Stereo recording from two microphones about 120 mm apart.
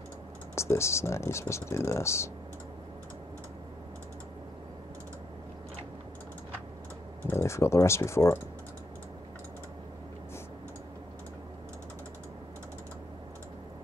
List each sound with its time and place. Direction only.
0.6 s speech: 25° left (ahead or behind)
7.2 s speech: 20° left (ahead or behind)